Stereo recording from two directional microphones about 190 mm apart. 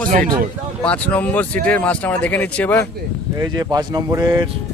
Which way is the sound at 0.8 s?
5° left (ahead or behind).